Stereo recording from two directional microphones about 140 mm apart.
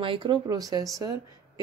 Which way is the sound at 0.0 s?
40° right (ahead or behind).